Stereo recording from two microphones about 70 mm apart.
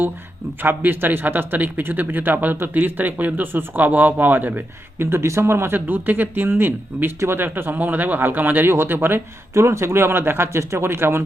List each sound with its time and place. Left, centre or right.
0.6 s speech: right